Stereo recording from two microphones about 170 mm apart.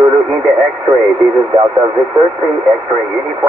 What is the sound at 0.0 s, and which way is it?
Speech, 25° right (ahead or behind).